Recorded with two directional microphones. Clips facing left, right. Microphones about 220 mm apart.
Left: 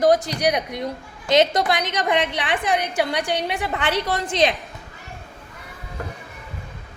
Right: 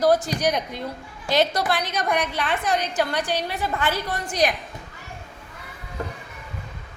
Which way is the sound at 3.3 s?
70° left (ahead or behind).